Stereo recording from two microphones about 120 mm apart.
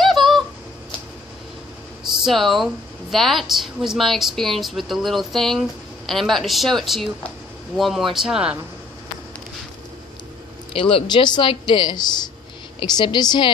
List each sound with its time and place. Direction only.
0.0 s squeak: centre (ahead or behind)
2.2 s a woman's voice: centre (ahead or behind)
10.7 s speech: 45° left (ahead or behind)